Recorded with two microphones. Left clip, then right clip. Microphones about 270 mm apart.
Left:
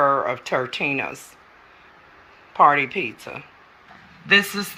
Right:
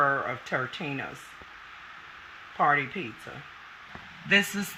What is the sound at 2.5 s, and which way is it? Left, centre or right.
Speech, centre.